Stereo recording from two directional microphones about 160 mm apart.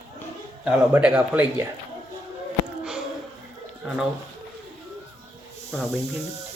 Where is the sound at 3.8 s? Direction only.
5° right (ahead or behind).